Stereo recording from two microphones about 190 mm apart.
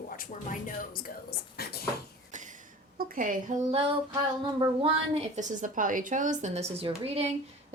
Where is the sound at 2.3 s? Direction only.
40° right (ahead or behind).